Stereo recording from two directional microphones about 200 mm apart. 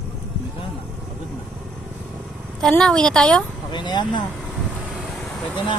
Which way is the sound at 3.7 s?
20° left (ahead or behind).